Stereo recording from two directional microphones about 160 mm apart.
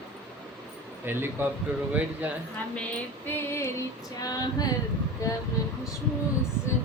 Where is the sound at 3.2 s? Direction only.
15° left (ahead or behind).